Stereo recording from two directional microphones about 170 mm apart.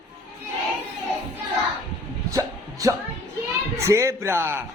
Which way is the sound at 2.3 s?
20° right (ahead or behind).